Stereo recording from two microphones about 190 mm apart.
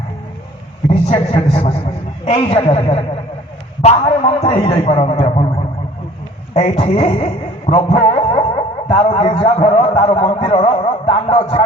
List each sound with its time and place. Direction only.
1.0 s a man's voice: 30° left (ahead or behind)
7.7 s a sound: 30° left (ahead or behind)
8.9 s a man's voice: 30° left (ahead or behind)